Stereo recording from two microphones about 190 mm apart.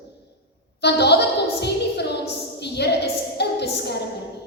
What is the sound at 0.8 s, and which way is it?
A woman's voice, 60° left (ahead or behind).